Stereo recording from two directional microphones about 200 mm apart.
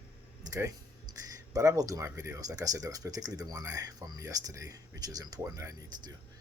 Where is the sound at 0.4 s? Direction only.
20° right (ahead or behind).